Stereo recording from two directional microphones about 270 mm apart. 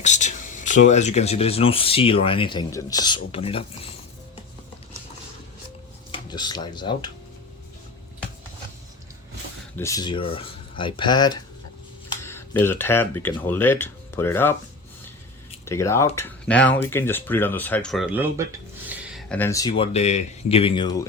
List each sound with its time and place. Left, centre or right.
0.0 s speech: left
6.1 s speech: centre
9.7 s speech: centre
15.6 s speech: centre